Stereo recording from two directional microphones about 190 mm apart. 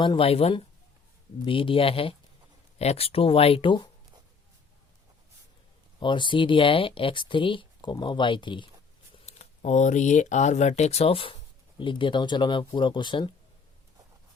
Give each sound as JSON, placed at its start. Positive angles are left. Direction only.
{"t": 0.0, "sound": "speech", "side_deg": 25}
{"t": 6.0, "sound": "speech", "side_deg": 25}
{"t": 9.2, "sound": "speech", "side_deg": 40}